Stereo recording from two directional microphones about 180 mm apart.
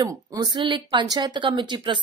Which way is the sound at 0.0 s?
20° right (ahead or behind).